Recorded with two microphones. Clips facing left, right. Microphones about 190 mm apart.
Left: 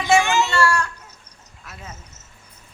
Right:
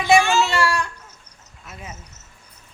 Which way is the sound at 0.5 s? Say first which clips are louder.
Left 1 dB; 15° right (ahead or behind).